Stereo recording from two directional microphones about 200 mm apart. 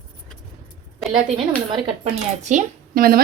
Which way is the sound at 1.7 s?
30° right (ahead or behind).